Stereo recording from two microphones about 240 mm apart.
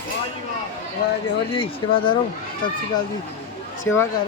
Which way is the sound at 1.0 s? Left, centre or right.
Left.